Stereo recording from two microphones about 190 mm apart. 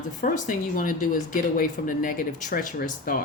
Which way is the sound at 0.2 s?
45° left (ahead or behind).